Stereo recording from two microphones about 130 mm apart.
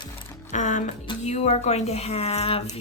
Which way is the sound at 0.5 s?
65° left (ahead or behind).